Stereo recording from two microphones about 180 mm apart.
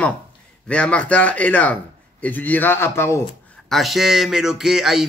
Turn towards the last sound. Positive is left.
turn(degrees=0)  # may be behind; listen again after turning